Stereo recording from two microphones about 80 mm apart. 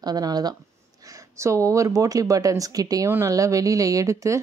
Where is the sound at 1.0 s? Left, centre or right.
Right.